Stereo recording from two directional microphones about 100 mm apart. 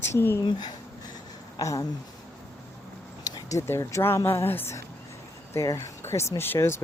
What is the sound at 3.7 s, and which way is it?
Speech, 25° left (ahead or behind).